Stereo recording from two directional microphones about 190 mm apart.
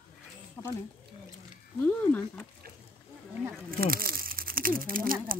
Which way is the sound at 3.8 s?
50° right (ahead or behind).